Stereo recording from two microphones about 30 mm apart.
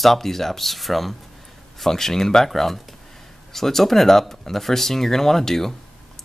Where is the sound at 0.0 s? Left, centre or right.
Centre.